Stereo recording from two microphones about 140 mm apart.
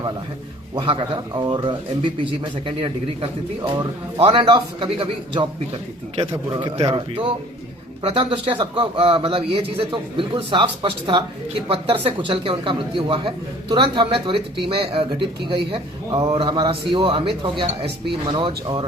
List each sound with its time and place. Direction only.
0.8 s a man's voice: 40° right (ahead or behind)